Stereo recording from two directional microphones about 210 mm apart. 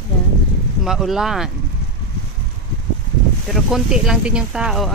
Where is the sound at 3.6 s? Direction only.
Centre (ahead or behind).